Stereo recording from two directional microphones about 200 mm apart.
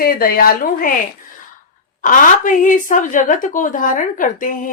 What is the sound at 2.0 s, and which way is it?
Speech, 40° left (ahead or behind).